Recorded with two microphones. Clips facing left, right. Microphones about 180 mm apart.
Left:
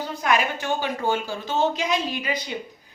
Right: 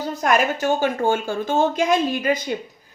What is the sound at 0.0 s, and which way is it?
Speech, 45° right (ahead or behind).